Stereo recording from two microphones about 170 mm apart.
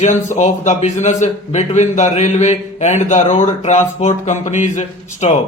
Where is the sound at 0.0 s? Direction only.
40° left (ahead or behind).